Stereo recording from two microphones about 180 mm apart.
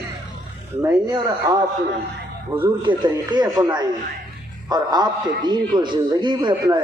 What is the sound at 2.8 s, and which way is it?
A man's voice, 25° right (ahead or behind).